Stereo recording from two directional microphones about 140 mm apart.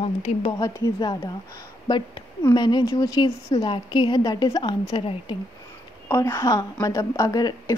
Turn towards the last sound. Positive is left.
turn(degrees=25)  # may be behind; listen again after turning